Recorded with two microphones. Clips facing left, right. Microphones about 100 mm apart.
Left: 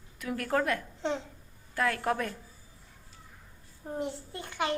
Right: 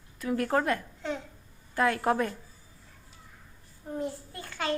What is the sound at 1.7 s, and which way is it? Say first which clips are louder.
Speech: right 3 dB; 10° right (ahead or behind).